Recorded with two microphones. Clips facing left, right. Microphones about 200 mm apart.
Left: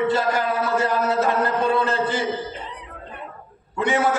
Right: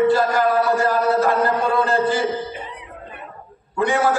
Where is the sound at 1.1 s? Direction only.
20° left (ahead or behind).